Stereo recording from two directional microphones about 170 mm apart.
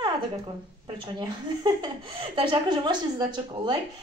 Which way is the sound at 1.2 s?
25° right (ahead or behind).